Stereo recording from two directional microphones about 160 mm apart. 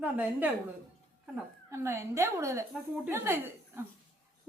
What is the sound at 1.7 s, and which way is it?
A child's voice, 20° right (ahead or behind).